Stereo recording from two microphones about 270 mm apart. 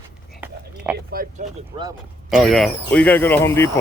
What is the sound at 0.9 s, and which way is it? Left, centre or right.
Speech, right.